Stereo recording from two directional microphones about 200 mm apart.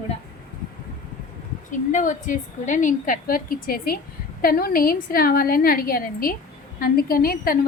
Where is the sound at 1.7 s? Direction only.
40° left (ahead or behind).